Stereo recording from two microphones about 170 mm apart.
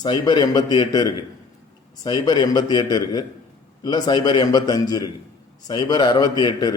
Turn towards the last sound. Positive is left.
turn(degrees=25)  # may be behind; listen again after turning